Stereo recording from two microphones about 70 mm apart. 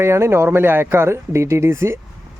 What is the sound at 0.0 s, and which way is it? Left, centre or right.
Speech, right.